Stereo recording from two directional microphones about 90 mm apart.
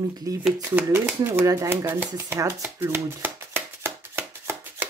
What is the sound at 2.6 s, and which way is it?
Shuffling cards, 30° right (ahead or behind).